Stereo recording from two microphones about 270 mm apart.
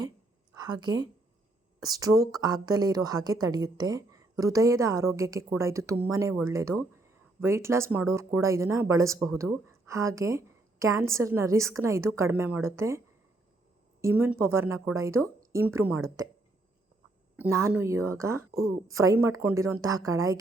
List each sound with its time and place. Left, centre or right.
0.6 s a woman's voice: centre
14.0 s a woman's voice: centre
17.3 s a woman's voice: centre